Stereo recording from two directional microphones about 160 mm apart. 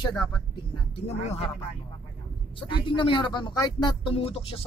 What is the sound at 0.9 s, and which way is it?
Speech, 40° left (ahead or behind).